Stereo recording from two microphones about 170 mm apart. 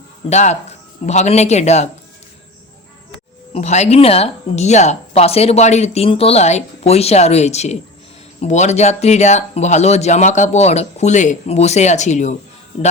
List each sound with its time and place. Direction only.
0.3 s speech: 40° left (ahead or behind)
3.5 s speech: 40° left (ahead or behind)